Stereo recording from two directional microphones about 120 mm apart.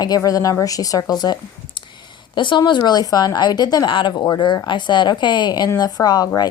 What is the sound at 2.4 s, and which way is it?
Speech, 40° left (ahead or behind).